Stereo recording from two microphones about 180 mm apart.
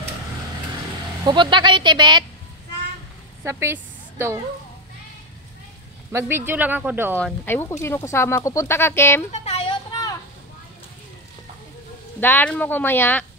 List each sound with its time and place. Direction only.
1.2 s speech: 25° right (ahead or behind)
3.4 s a woman's voice: 15° right (ahead or behind)
6.1 s speech: 15° right (ahead or behind)
7.2 s speech: 10° left (ahead or behind)
9.3 s a sound: 35° left (ahead or behind)
12.2 s speech: 10° left (ahead or behind)